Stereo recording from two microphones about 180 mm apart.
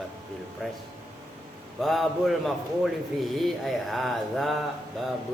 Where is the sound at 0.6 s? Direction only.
Centre (ahead or behind).